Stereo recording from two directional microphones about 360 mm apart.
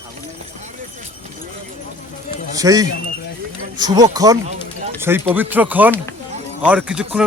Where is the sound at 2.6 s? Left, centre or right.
Centre.